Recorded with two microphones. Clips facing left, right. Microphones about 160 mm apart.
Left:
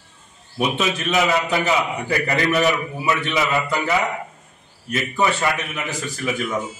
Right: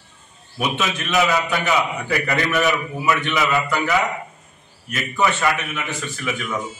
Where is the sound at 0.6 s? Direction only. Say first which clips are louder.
Left 2 dB; 30° left (ahead or behind).